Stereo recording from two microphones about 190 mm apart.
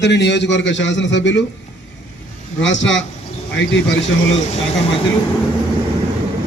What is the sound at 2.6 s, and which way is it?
Speech, 75° left (ahead or behind).